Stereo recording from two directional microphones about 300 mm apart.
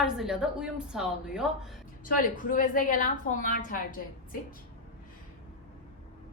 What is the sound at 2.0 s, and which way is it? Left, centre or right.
A woman's voice, left.